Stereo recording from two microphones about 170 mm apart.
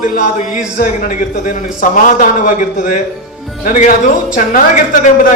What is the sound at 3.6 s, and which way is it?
A man's voice, 55° left (ahead or behind).